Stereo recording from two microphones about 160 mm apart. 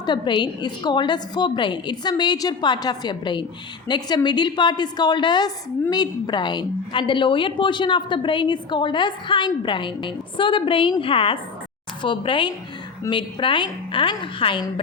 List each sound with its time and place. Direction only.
0.0 s a woman's voice: 30° left (ahead or behind)